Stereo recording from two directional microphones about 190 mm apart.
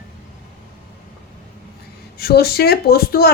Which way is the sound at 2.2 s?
55° left (ahead or behind).